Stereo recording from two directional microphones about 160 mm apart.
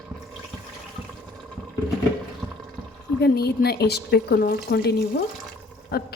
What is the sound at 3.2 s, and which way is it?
A woman's voice, 90° left.